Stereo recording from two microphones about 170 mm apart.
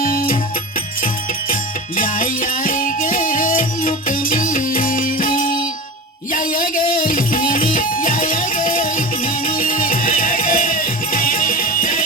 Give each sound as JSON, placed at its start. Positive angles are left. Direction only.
{"t": 0.0, "sound": "music", "side_deg": 55}
{"t": 2.0, "sound": "music", "side_deg": 55}